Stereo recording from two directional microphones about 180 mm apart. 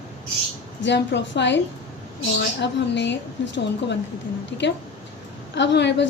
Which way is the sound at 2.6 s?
80° left.